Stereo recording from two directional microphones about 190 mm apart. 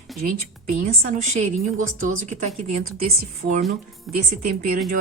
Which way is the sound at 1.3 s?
40° right (ahead or behind).